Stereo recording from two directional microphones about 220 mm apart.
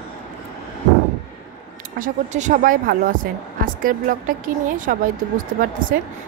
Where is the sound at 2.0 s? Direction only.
35° right (ahead or behind).